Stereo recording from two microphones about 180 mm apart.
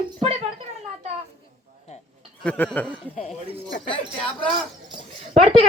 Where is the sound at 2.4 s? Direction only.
5° left (ahead or behind).